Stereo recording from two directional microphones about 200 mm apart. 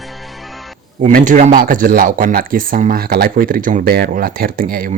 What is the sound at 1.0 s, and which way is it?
Speech, 40° right (ahead or behind).